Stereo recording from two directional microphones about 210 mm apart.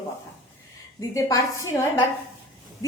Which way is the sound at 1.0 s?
15° left (ahead or behind).